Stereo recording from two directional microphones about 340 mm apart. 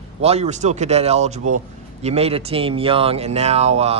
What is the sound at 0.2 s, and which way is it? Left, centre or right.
Speech, centre.